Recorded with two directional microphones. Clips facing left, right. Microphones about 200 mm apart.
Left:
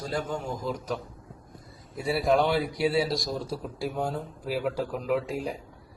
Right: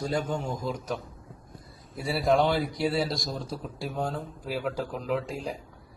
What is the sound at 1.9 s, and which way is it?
Speech, centre (ahead or behind).